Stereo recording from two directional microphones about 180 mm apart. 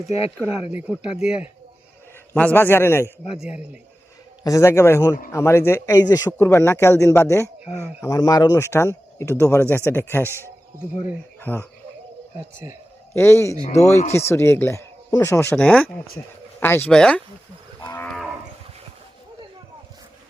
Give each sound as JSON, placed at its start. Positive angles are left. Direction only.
{"t": 0.9, "sound": "speech", "side_deg": -5}
{"t": 2.3, "sound": "speech", "side_deg": 10}
{"t": 4.4, "sound": "speech", "side_deg": 15}
{"t": 7.6, "sound": "speech", "side_deg": -5}
{"t": 8.0, "sound": "speech", "side_deg": 20}
{"t": 10.2, "sound": "speech", "side_deg": -15}
{"t": 11.3, "sound": "speech", "side_deg": 10}
{"t": 12.6, "sound": "speech", "side_deg": -20}
{"t": 13.1, "sound": "speech", "side_deg": 15}
{"t": 13.7, "sound": "speech", "side_deg": 40}
{"t": 14.2, "sound": "speech", "side_deg": 15}
{"t": 17.7, "sound": "moo", "side_deg": 10}